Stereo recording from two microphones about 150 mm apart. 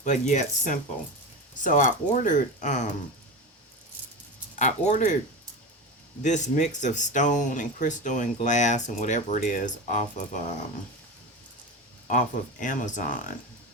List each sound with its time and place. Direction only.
0.0 s speech: 50° left (ahead or behind)
4.5 s speech: 50° left (ahead or behind)
6.2 s speech: 55° left (ahead or behind)
12.0 s speech: 60° left (ahead or behind)